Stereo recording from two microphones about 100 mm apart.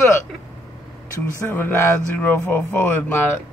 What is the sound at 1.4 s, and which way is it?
Speech, 20° left (ahead or behind).